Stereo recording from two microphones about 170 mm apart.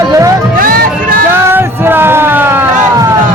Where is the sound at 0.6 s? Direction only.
60° right (ahead or behind).